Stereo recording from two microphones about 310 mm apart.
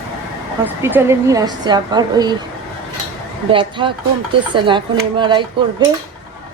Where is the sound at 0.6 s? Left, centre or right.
Centre.